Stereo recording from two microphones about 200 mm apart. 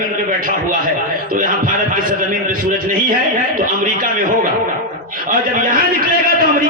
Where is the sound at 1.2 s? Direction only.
45° right (ahead or behind).